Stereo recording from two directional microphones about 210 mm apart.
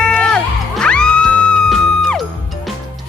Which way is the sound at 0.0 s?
5° left (ahead or behind).